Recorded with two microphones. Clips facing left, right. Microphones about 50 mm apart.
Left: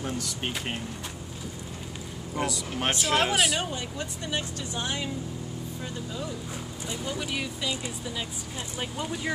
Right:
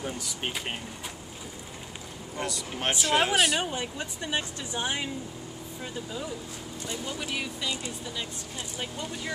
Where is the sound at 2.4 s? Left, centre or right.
Centre.